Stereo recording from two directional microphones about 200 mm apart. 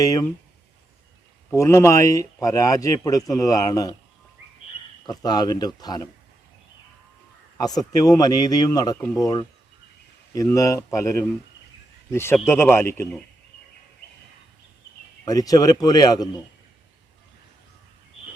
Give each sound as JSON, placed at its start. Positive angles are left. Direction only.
{"t": 0.0, "sound": "speech", "side_deg": 15}
{"t": 1.5, "sound": "speech", "side_deg": 15}
{"t": 5.0, "sound": "a man's voice", "side_deg": 20}
{"t": 7.6, "sound": "a man's voice", "side_deg": 20}
{"t": 15.2, "sound": "a man's voice", "side_deg": 20}